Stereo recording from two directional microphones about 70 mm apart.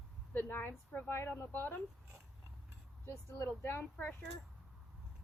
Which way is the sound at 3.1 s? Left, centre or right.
Left.